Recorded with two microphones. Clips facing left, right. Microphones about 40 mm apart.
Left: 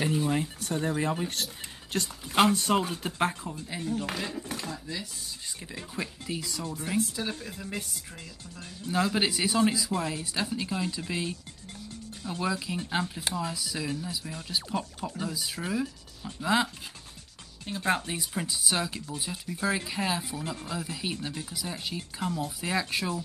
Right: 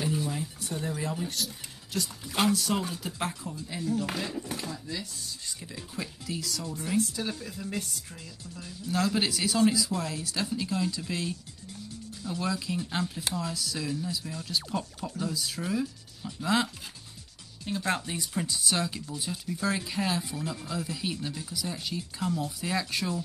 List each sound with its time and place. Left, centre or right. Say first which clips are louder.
0.3 s a sound: left 5 dB; left
0.7 s speech: left 4 dB; left
4.1 s a sound: even; centre
4.6 s speech: even; centre
8.5 s speech: even; left
8.9 s speech: left 1 dB; centre